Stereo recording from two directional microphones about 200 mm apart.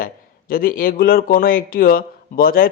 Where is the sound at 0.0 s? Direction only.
45° left (ahead or behind).